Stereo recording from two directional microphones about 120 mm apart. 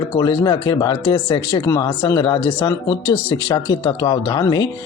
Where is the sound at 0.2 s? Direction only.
35° left (ahead or behind).